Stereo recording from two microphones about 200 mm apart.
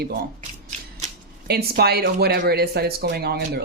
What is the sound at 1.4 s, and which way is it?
Speech, 50° right (ahead or behind).